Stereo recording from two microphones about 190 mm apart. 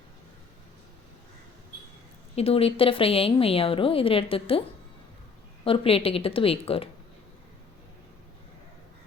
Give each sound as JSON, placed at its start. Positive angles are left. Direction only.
{"t": 2.3, "sound": "a woman's voice", "side_deg": 30}
{"t": 5.6, "sound": "a woman's voice", "side_deg": 30}